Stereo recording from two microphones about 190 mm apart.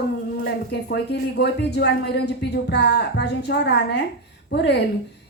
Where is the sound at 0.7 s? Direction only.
60° left (ahead or behind).